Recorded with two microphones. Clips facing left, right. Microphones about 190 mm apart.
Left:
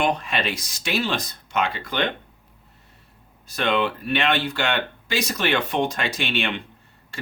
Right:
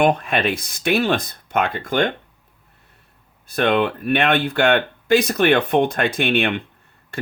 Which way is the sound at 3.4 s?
55° right (ahead or behind).